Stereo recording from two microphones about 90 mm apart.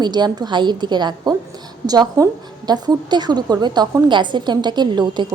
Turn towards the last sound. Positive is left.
turn(degrees=-55)  # may be behind; listen again after turning